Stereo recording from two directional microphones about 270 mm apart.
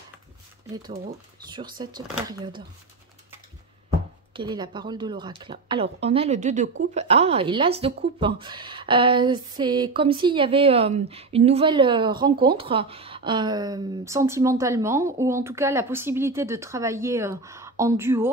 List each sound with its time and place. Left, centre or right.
1.5 s speech: centre
4.3 s speech: centre